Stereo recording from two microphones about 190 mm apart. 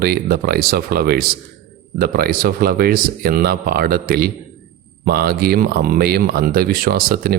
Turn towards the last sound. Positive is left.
turn(degrees=-50)  # may be behind; listen again after turning